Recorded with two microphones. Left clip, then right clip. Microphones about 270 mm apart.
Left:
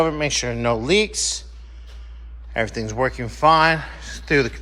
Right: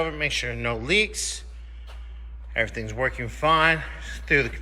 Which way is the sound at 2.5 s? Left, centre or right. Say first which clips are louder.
Left 3 dB; centre.